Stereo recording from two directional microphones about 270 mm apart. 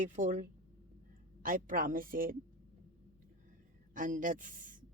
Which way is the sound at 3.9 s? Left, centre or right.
Right.